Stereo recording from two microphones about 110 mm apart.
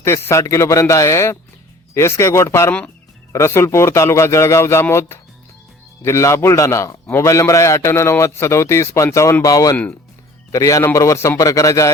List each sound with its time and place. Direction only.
0.0 s a man's voice: 25° left (ahead or behind)